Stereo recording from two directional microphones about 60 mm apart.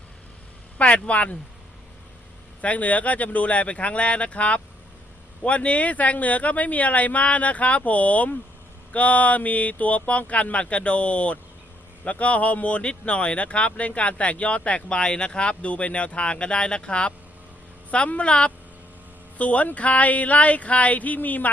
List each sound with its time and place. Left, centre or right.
0.8 s speech: left
2.6 s speech: left